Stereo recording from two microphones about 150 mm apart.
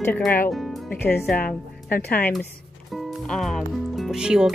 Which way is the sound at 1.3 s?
75° left (ahead or behind).